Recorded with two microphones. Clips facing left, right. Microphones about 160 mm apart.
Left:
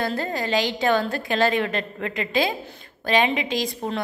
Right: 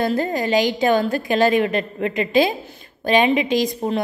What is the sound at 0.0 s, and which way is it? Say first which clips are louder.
A woman's voice: right 5 dB; 15° right (ahead or behind).